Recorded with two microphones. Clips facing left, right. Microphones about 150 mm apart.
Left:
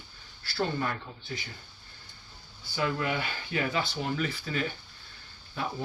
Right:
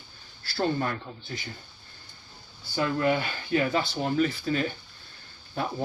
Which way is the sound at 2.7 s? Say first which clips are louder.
Right 5 dB; 40° right (ahead or behind).